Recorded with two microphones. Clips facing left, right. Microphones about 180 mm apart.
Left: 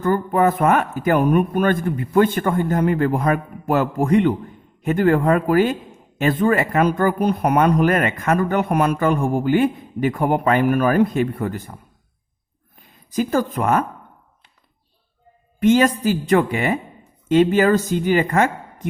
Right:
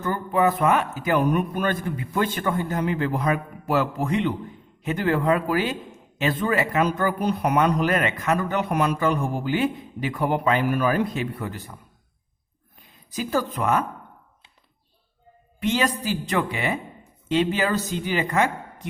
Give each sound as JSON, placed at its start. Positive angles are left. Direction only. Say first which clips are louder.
{"t": 0.0, "sound": "a man's voice", "louder": "left 4 dB", "side_deg": 50}
{"t": 12.8, "sound": "speech", "louder": "left 8 dB", "side_deg": 50}
{"t": 15.6, "sound": "a man's voice", "louder": "left 8 dB", "side_deg": 50}